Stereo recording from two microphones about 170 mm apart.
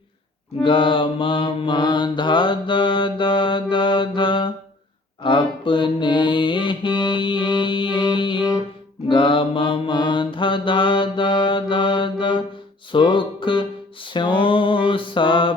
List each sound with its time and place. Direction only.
0.6 s mantra: 30° left (ahead or behind)
12.9 s music: 30° left (ahead or behind)